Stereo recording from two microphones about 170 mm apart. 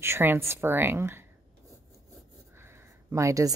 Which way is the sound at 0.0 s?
15° right (ahead or behind).